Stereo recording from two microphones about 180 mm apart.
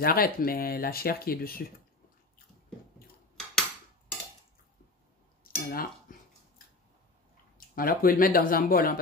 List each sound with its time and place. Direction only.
0.0 s speech: 55° left (ahead or behind)
5.4 s cutlery: 55° left (ahead or behind)
7.5 s speech: 55° left (ahead or behind)